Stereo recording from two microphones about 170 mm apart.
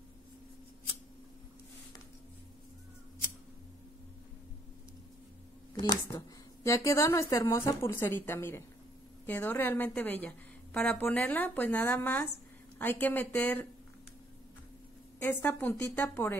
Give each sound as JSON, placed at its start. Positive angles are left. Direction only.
{"t": 5.8, "sound": "a woman's voice", "side_deg": 25}
{"t": 15.2, "sound": "a woman's voice", "side_deg": 15}